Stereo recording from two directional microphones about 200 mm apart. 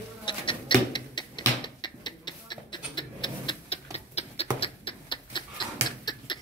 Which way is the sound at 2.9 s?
25° left (ahead or behind).